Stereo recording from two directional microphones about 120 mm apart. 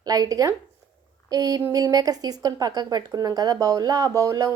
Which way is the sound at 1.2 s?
30° right (ahead or behind).